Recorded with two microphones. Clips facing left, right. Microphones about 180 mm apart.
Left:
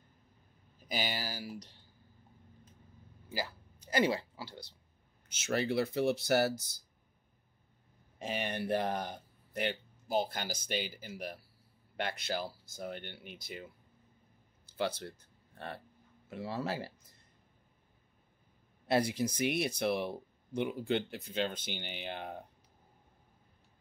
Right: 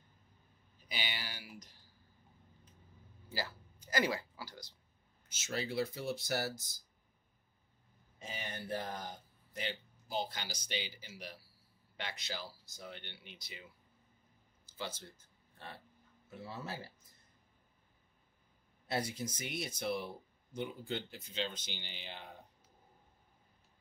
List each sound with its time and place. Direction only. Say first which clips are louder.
0.7 s speech: left 7 dB; 45° left (ahead or behind)
3.3 s speech: left 3 dB; 15° left (ahead or behind)
3.8 s speech: left 4 dB; 25° left (ahead or behind)
5.5 s speech: left 5 dB; 60° left (ahead or behind)
8.2 s speech: left 9 dB; 70° left (ahead or behind); by 13.7 s 50° left (ahead or behind)
14.7 s speech: left 9 dB; 65° left (ahead or behind)
16.3 s speech: left 8 dB; 80° left
18.9 s speech: left 8 dB; 70° left (ahead or behind); by 22.4 s 55° left (ahead or behind)